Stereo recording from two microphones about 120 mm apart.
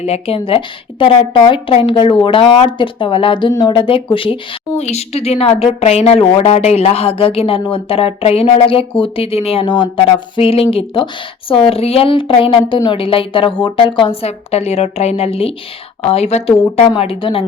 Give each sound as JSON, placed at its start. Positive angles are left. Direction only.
{"t": 0.0, "sound": "a woman's voice", "side_deg": 55}
{"t": 4.8, "sound": "a woman's voice", "side_deg": 65}
{"t": 17.0, "sound": "a woman's voice", "side_deg": 50}